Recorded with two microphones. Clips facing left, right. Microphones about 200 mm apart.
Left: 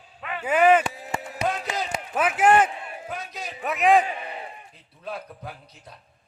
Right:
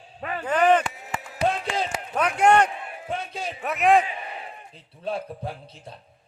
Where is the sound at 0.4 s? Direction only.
10° left (ahead or behind).